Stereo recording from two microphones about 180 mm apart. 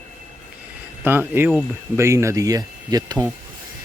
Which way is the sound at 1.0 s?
10° right (ahead or behind).